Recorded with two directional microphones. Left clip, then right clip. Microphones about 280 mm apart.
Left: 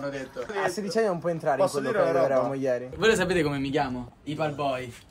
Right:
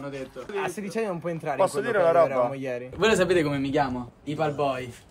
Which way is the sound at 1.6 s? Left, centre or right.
Right.